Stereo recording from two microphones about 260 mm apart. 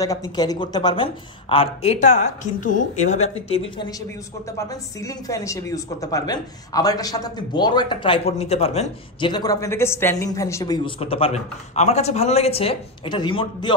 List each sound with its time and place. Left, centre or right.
0.0 s a man's voice: centre
4.6 s a woman's voice: centre